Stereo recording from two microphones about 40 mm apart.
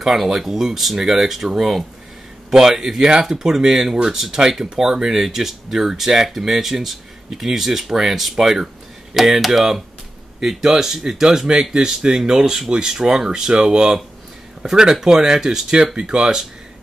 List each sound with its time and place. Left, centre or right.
0.0 s speech: centre